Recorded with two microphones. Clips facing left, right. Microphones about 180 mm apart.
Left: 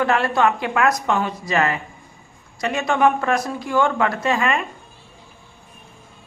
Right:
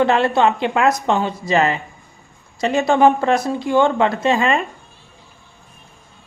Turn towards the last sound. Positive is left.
turn(degrees=-25)  # may be behind; listen again after turning